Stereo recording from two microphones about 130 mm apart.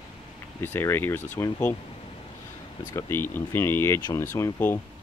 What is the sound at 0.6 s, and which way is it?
Speech, 15° left (ahead or behind).